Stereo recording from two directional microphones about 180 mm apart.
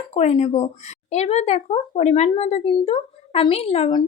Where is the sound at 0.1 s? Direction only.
35° left (ahead or behind).